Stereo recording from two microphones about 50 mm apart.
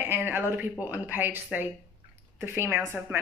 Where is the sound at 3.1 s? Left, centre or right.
Right.